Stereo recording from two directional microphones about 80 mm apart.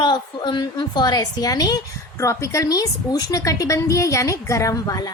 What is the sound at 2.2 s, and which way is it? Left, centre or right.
A woman's voice, left.